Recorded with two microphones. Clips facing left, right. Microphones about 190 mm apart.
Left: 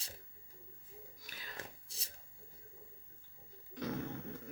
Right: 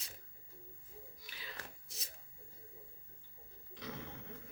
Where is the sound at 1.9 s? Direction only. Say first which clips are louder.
Right 2 dB; 30° left (ahead or behind).